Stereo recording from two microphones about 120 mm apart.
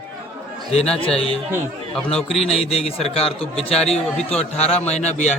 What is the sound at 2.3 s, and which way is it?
Speech, 60° left (ahead or behind).